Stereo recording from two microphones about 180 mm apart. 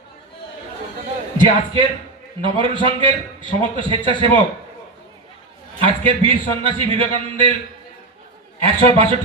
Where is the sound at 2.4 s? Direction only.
25° right (ahead or behind).